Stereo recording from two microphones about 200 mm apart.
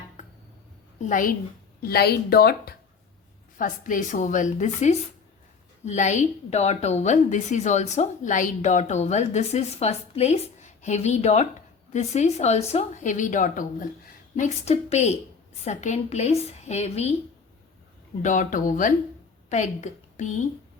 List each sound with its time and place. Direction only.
0.9 s a woman's voice: 40° left (ahead or behind)
18.2 s a woman's voice: 40° left (ahead or behind)